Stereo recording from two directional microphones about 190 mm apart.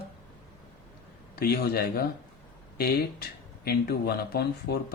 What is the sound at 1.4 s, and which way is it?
Speech, 55° left (ahead or behind).